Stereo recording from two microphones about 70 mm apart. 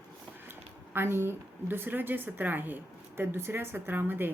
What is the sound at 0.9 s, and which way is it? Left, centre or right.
A woman's voice, right.